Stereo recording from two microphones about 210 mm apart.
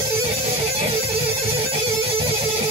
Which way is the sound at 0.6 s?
30° right (ahead or behind).